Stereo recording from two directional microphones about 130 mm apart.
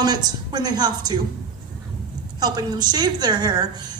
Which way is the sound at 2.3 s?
30° right (ahead or behind).